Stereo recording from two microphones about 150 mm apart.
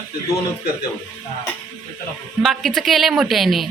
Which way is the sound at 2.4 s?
Centre (ahead or behind).